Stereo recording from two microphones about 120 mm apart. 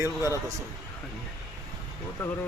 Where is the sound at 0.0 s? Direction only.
25° right (ahead or behind).